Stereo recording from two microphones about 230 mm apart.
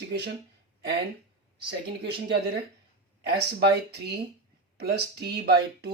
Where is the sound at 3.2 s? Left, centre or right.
Right.